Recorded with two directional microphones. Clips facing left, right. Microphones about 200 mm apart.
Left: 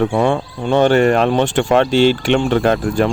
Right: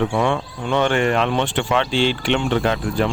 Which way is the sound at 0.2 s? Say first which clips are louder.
Left 4 dB; 35° left (ahead or behind).